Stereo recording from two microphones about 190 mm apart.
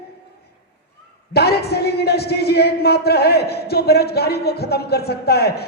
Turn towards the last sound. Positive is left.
turn(degrees=55)  # may be behind; listen again after turning